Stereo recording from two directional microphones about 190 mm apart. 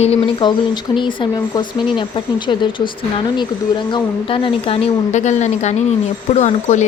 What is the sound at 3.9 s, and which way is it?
Speech, 25° left (ahead or behind).